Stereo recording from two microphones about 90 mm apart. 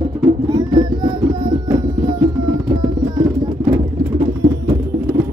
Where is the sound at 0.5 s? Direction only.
50° right (ahead or behind).